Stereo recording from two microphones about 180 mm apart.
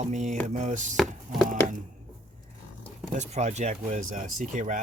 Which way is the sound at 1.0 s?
Centre (ahead or behind).